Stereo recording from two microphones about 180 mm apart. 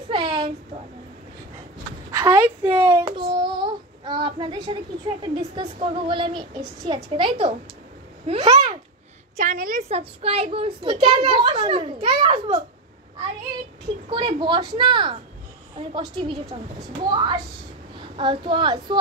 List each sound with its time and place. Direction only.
0.1 s a sound: 30° right (ahead or behind)
2.0 s a child's voice: 20° right (ahead or behind)
9.4 s a woman's voice: 50° right (ahead or behind)
9.8 s a child's voice: 35° right (ahead or behind)
14.1 s a woman's voice: 25° right (ahead or behind)